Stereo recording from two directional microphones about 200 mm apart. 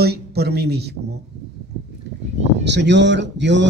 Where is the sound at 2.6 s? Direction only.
60° right (ahead or behind).